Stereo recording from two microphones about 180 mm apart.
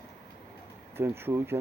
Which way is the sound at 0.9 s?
10° right (ahead or behind).